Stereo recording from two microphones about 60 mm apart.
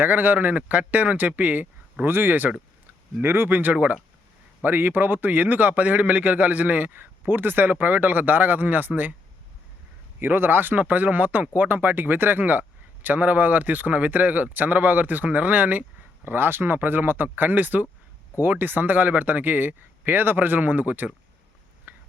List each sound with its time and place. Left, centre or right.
0.0 s speech: right
2.0 s a man's voice: right
10.2 s speech: right
16.2 s a man's voice: right
21.9 s a sound: right